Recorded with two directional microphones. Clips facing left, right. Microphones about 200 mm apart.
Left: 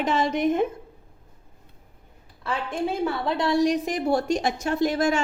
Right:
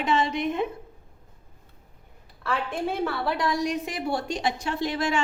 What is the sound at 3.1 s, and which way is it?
A woman's voice, 25° left (ahead or behind).